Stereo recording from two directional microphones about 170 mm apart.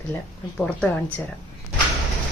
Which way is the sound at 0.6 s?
5° left (ahead or behind).